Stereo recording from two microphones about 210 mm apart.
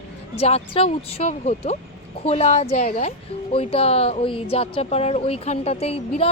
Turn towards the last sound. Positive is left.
turn(degrees=30)  # may be behind; listen again after turning